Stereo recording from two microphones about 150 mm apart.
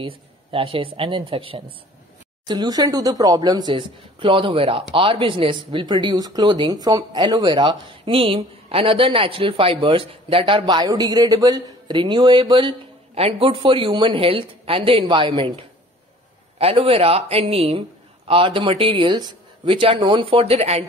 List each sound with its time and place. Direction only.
0.0 s a woman's voice: 35° right (ahead or behind)